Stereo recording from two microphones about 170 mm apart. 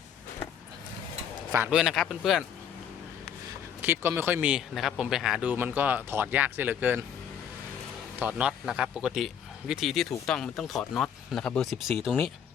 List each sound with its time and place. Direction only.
1.5 s a man's voice: 10° right (ahead or behind)
3.8 s speech: 15° right (ahead or behind)
8.2 s a man's voice: 5° right (ahead or behind)